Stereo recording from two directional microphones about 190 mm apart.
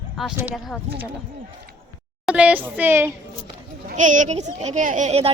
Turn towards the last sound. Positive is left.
turn(degrees=-35)  # may be behind; listen again after turning